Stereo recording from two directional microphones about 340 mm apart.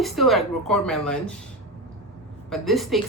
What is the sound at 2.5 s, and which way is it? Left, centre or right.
Speech, centre.